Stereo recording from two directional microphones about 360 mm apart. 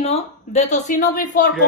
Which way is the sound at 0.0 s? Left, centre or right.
Centre.